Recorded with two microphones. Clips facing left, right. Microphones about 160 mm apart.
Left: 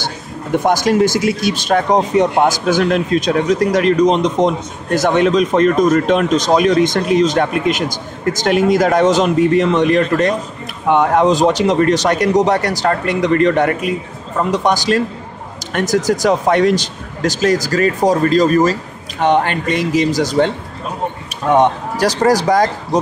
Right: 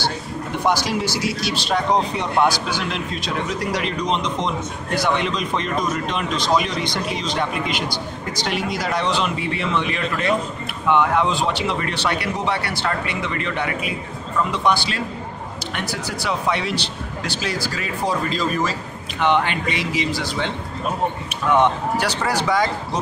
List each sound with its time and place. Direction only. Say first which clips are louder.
0.6 s speech: left 8 dB; 50° left (ahead or behind)